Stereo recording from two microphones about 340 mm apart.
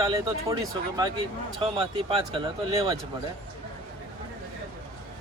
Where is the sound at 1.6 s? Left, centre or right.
Centre.